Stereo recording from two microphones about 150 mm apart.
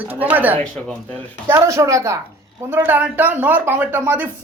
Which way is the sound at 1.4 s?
20° right (ahead or behind).